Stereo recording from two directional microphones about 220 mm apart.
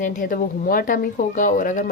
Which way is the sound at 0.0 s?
35° left (ahead or behind).